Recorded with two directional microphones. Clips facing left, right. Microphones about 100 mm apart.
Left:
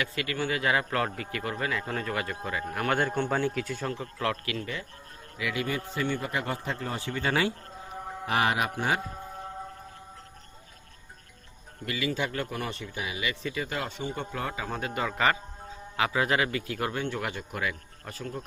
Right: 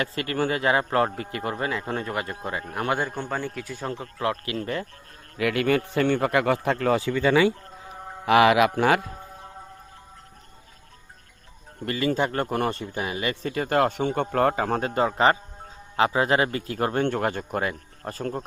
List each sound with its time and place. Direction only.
0.0 s speech: 35° right (ahead or behind)
3.2 s a man's voice: centre (ahead or behind)
3.8 s speech: 25° right (ahead or behind)
4.5 s speech: 45° right (ahead or behind)
5.4 s a man's voice: 60° right (ahead or behind); by 7.0 s 85° right
8.3 s speech: 90° right
11.9 s speech: 40° right (ahead or behind)
14.8 s a man's voice: 35° right (ahead or behind)